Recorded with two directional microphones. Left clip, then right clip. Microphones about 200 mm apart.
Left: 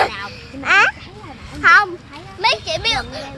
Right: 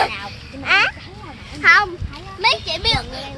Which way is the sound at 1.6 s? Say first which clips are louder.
Left 1 dB; 25° left (ahead or behind).